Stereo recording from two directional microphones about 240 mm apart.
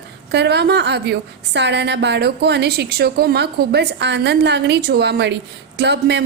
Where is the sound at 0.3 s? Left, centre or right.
Right.